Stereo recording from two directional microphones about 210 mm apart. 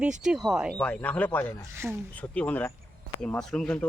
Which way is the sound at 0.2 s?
Centre (ahead or behind).